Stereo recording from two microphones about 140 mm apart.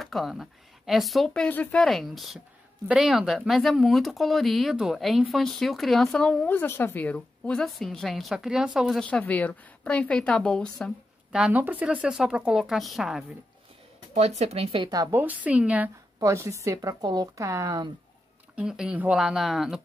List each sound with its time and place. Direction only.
0.0 s speech: centre (ahead or behind)
9.0 s a woman's voice: 10° left (ahead or behind)
11.3 s speech: 10° right (ahead or behind)
14.1 s speech: 50° right (ahead or behind)
14.9 s a woman's voice: 25° right (ahead or behind)
15.1 s a woman's voice: 10° right (ahead or behind)
16.2 s a woman's voice: 20° right (ahead or behind)
18.6 s speech: 5° right (ahead or behind)